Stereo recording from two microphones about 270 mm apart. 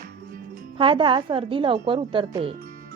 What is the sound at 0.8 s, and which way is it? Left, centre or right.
Speech, centre.